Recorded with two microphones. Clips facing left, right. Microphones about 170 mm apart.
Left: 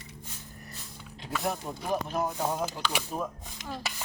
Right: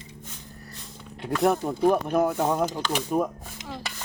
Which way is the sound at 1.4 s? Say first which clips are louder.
Right 13 dB; 60° right (ahead or behind).